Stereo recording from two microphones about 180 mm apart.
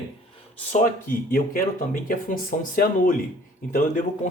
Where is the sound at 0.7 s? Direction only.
50° left (ahead or behind).